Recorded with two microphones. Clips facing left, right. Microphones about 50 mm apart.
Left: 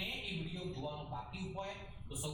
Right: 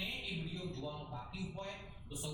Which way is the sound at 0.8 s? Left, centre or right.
Centre.